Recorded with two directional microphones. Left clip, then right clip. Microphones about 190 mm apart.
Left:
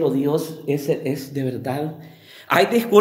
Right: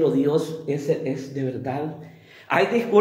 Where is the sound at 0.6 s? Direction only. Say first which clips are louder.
Left 2 dB; 55° left (ahead or behind).